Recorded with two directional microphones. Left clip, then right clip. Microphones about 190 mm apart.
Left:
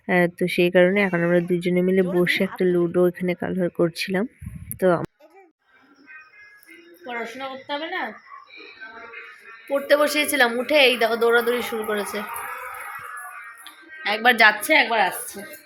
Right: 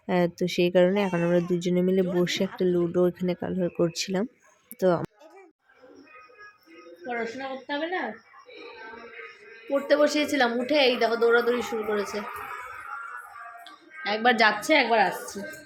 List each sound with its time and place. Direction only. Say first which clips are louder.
0.0 s speech: left 5 dB; 20° left (ahead or behind)
2.9 s speech: left 4 dB; 20° left (ahead or behind)
7.0 s a woman's voice: left 1 dB; centre (ahead or behind)
9.6 s a woman's voice: left 3 dB; 5° left (ahead or behind)
13.7 s speech: left 4 dB; centre (ahead or behind)